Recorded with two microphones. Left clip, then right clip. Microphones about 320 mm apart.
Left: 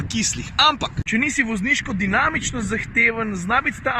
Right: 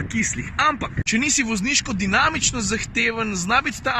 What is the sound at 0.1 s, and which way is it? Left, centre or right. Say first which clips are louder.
Speech: left 1 dB; centre.